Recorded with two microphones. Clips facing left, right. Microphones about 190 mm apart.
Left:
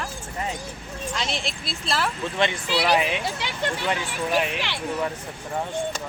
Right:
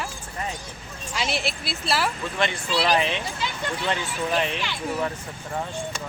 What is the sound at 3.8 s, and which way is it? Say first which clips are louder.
Speech: even; 5° left (ahead or behind).